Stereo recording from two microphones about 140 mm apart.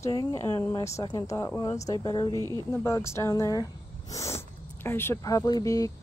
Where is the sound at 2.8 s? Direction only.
20° left (ahead or behind).